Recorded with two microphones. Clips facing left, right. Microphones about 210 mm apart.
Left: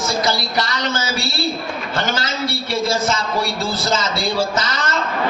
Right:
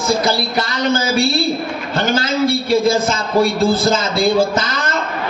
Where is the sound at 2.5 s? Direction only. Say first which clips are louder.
Right 6 dB; 55° right (ahead or behind).